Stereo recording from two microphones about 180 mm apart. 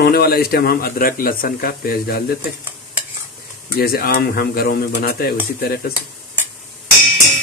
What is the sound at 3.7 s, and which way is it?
Speech, 60° left (ahead or behind).